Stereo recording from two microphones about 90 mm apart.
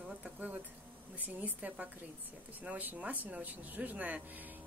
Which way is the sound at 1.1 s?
15° right (ahead or behind).